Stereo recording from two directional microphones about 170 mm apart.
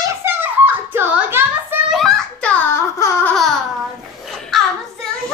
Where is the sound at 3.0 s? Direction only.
15° left (ahead or behind).